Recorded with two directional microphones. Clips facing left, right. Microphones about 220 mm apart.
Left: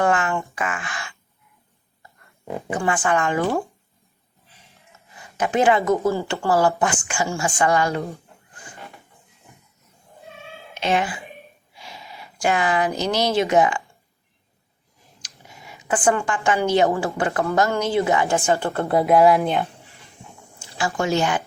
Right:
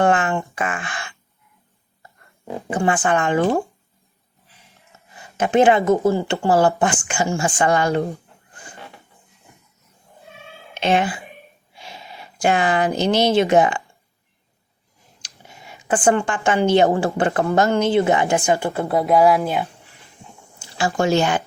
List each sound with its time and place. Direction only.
0.0 s a sound: 25° right (ahead or behind)
0.5 s speech: 30° right (ahead or behind)
2.6 s speech: 25° right (ahead or behind)
4.9 s a sound: 25° right (ahead or behind)
5.4 s speech: 25° right (ahead or behind)
10.8 s speech: 25° right (ahead or behind)
11.8 s gasp: 25° right (ahead or behind)
12.2 s speech: 25° right (ahead or behind)
15.2 s a woman's voice: 30° right (ahead or behind); by 19.7 s centre (ahead or behind)
20.9 s speech: 30° right (ahead or behind)